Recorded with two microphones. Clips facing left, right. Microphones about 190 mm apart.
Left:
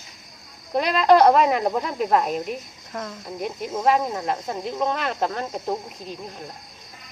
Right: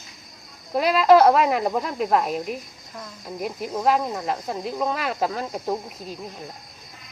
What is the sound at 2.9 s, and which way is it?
Speech, 70° left (ahead or behind).